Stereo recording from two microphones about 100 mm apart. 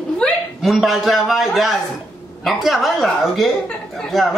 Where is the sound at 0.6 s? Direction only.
Centre (ahead or behind).